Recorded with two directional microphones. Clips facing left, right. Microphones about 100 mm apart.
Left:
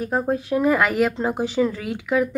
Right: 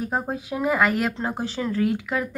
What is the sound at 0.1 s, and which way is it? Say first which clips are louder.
A woman's voice: left 6 dB; 5° right (ahead or behind).